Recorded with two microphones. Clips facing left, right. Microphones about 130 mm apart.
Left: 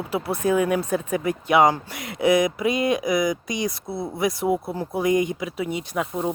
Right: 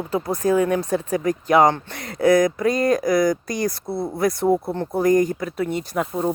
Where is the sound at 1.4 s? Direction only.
5° left (ahead or behind).